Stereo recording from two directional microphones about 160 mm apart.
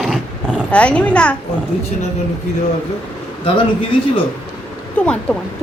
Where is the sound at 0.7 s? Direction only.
5° left (ahead or behind).